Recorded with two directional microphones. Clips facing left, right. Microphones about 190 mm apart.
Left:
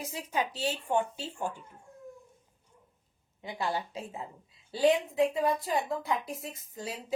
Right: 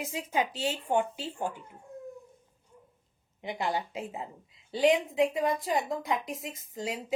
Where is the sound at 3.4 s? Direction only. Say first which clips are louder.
Right 2 dB; 20° right (ahead or behind).